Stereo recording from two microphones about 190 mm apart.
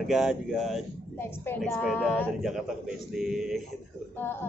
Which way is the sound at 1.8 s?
5° left (ahead or behind).